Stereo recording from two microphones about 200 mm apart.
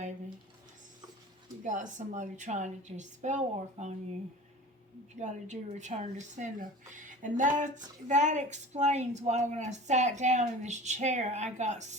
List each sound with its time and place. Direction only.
1.6 s a woman's voice: 40° right (ahead or behind)
5.2 s a woman's voice: 35° right (ahead or behind)